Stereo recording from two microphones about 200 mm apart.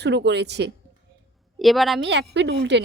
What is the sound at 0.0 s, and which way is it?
Speech, 60° right (ahead or behind).